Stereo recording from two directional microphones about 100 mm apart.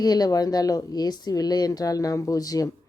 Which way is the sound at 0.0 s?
40° left (ahead or behind).